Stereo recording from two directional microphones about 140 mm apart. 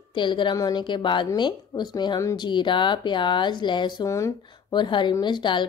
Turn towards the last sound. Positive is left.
turn(degrees=35)  # may be behind; listen again after turning